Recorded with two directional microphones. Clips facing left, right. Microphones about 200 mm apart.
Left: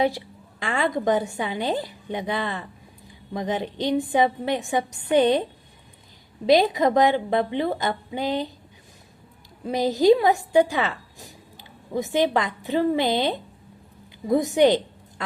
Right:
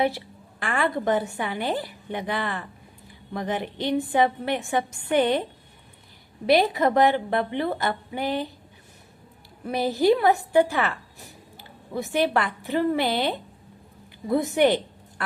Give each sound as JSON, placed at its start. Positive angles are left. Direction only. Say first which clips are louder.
{"t": 0.6, "sound": "a woman's voice", "louder": "left 1 dB", "side_deg": 15}
{"t": 6.4, "sound": "a woman's voice", "louder": "left 2 dB", "side_deg": 15}
{"t": 9.6, "sound": "a woman's voice", "louder": "left 3 dB", "side_deg": 15}